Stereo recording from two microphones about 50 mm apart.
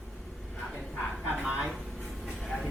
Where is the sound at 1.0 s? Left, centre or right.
Centre.